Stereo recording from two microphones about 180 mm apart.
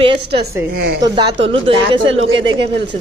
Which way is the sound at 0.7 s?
60° right (ahead or behind).